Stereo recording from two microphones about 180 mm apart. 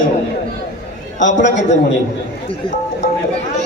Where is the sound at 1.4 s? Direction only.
80° left.